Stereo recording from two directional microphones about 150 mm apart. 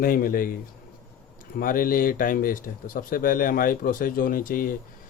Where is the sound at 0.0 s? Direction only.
70° left (ahead or behind).